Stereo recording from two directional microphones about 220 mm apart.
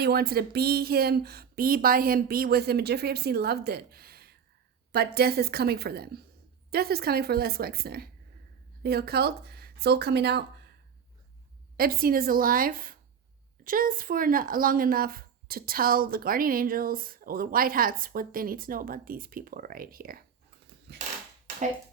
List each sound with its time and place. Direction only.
0.0 s speech: 45° right (ahead or behind)
11.8 s speech: 40° right (ahead or behind)